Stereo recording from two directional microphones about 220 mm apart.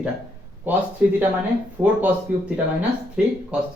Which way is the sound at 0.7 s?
10° right (ahead or behind).